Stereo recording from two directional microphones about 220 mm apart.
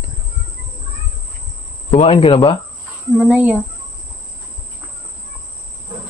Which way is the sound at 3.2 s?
5° right (ahead or behind).